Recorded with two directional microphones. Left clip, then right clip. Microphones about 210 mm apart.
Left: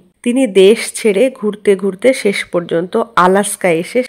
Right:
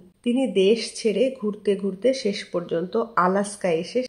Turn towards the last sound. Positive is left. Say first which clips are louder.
# left 10 dB
turn(degrees=35)  # may be behind; listen again after turning